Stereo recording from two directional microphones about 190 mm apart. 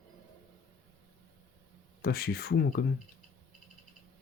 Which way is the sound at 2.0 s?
55° left (ahead or behind).